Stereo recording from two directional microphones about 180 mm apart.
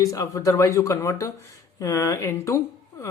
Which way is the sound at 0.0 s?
20° left (ahead or behind).